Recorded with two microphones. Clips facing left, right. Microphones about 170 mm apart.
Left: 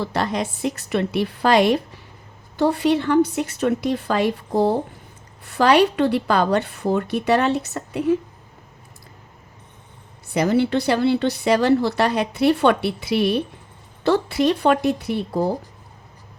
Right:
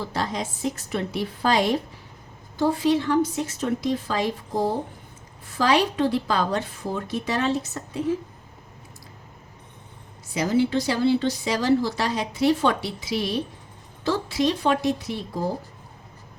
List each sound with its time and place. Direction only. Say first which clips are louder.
0.1 s a woman's voice: left 5 dB; 65° left (ahead or behind)
10.2 s speech: left 3 dB; 60° left (ahead or behind)